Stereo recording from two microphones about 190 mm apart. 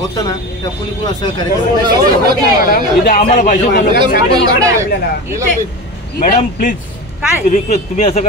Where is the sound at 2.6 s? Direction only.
45° left (ahead or behind).